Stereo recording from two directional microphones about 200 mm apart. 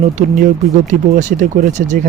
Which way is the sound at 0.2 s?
40° right (ahead or behind).